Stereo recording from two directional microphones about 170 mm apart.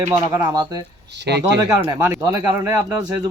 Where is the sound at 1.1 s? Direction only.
85° right.